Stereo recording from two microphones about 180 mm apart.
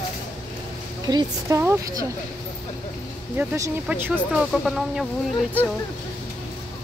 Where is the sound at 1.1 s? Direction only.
15° right (ahead or behind).